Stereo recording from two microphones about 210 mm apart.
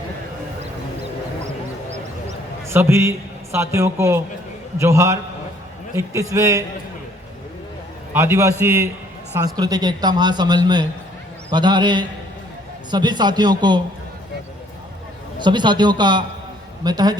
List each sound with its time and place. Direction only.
2.6 s a man's voice: 10° right (ahead or behind)
6.3 s a man's voice: 15° right (ahead or behind)
8.1 s a man's voice: 10° right (ahead or behind)
15.4 s speech: 20° right (ahead or behind)